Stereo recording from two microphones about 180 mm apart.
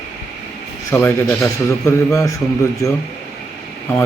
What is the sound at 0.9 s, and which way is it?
A man's voice, 15° left (ahead or behind).